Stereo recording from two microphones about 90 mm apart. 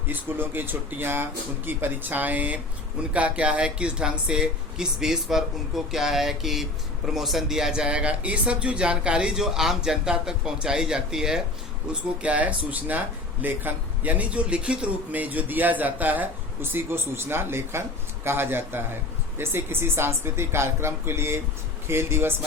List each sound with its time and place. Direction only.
0.1 s a man's voice: 25° right (ahead or behind)